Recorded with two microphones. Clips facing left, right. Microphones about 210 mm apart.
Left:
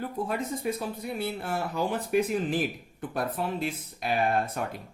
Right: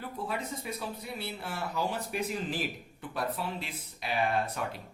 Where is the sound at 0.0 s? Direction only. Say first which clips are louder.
Left 5 dB; 50° left (ahead or behind).